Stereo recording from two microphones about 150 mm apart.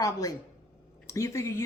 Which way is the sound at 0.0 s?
25° left (ahead or behind).